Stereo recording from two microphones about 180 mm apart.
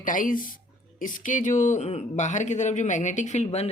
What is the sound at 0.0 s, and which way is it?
Speech, 50° left (ahead or behind).